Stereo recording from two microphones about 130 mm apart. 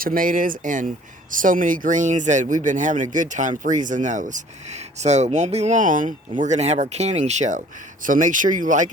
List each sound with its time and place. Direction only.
0.0 s speech: 90° right
6.4 s speech: 60° right (ahead or behind)
8.0 s speech: 90° right